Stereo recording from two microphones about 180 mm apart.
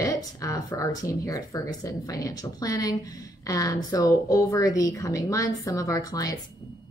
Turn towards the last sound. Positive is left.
turn(degrees=20)  # may be behind; listen again after turning